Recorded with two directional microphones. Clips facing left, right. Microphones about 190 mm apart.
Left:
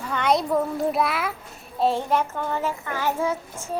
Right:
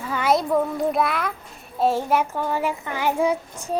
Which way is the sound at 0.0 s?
5° right (ahead or behind).